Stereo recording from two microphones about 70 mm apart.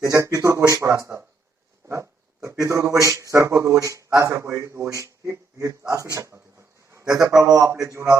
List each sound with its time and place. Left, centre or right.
0.0 s speech: right
5.9 s a sound: right
7.0 s a man's voice: right
7.6 s speech: right